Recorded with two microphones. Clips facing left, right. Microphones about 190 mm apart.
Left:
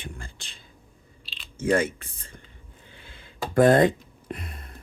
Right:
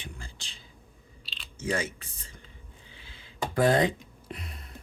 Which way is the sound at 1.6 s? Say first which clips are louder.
Left 8 dB; 55° left (ahead or behind).